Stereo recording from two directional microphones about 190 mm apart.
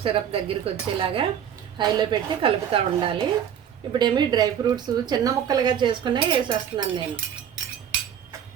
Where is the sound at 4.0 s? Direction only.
20° right (ahead or behind).